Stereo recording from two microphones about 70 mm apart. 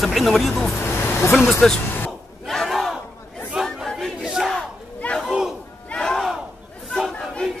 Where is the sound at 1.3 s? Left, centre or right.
Centre.